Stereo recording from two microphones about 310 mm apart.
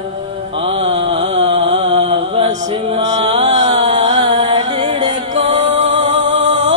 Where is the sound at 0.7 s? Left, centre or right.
Centre.